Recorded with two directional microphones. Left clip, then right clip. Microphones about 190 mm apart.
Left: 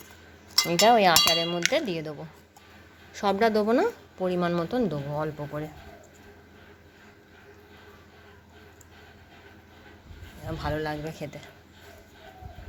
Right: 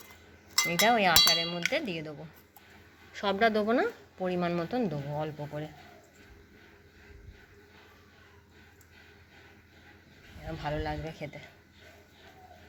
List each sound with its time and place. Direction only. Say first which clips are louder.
0.7 s speech: left 5 dB; 10° left (ahead or behind)
10.4 s speech: left 4 dB; 15° left (ahead or behind)